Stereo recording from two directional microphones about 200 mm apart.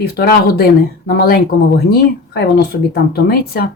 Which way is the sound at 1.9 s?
50° left (ahead or behind).